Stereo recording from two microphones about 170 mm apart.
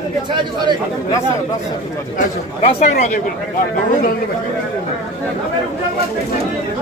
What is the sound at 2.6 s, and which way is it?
Speech, 40° left (ahead or behind).